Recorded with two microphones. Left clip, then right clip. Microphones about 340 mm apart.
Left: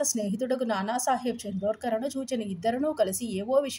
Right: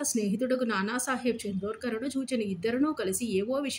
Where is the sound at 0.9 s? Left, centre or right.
Left.